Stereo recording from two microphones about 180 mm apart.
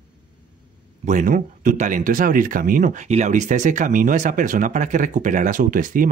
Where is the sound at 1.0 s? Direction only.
45° right (ahead or behind).